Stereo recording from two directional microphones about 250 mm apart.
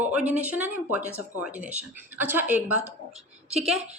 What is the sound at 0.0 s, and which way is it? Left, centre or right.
A woman's voice, centre.